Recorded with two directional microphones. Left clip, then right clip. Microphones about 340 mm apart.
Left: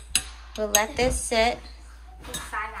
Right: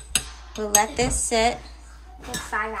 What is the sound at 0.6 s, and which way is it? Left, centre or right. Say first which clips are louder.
Speech: right 2 dB; centre.